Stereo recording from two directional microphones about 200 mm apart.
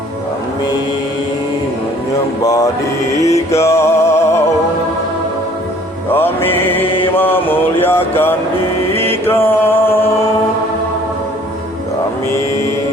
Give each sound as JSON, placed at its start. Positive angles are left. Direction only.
{"t": 2.4, "sound": "mantra", "side_deg": 15}
{"t": 3.2, "sound": "music", "side_deg": 15}
{"t": 6.1, "sound": "music", "side_deg": 10}
{"t": 7.2, "sound": "a sound", "side_deg": 10}
{"t": 9.0, "sound": "mantra", "side_deg": 10}